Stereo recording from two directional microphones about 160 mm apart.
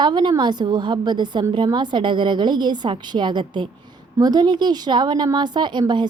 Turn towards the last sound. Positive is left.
turn(degrees=-30)  # may be behind; listen again after turning